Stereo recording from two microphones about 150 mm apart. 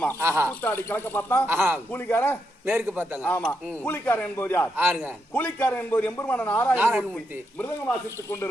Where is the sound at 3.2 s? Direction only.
10° left (ahead or behind).